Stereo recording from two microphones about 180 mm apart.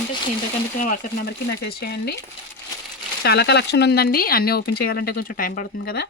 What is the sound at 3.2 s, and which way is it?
Speech, 65° left (ahead or behind).